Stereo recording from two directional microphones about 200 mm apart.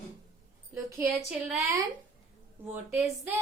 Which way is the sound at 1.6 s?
15° right (ahead or behind).